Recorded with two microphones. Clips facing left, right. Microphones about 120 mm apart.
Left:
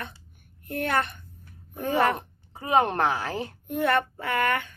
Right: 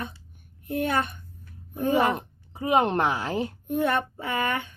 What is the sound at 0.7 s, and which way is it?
A child's voice, 15° right (ahead or behind).